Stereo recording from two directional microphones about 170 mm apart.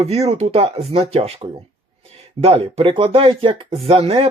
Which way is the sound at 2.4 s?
35° right (ahead or behind).